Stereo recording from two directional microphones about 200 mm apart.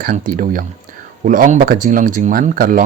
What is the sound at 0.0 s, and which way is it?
A man's voice, 45° right (ahead or behind).